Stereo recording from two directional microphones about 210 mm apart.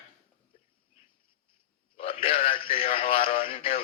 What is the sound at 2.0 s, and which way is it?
Radio, 25° left (ahead or behind).